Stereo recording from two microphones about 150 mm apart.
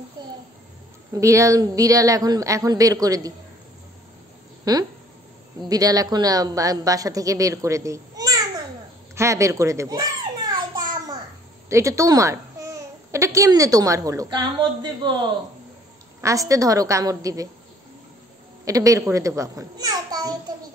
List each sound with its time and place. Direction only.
0.2 s music: 30° right (ahead or behind)
1.1 s a woman's voice: 20° right (ahead or behind)
4.7 s a woman's voice: 25° right (ahead or behind)
11.7 s speech: 20° right (ahead or behind)
16.2 s a woman's voice: 20° right (ahead or behind)
18.7 s a woman's voice: 20° right (ahead or behind)